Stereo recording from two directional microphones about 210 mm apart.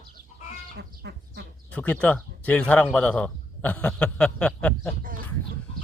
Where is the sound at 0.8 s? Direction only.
55° right (ahead or behind).